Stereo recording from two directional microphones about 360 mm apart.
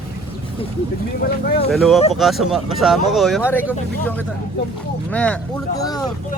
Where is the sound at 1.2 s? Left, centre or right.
Left.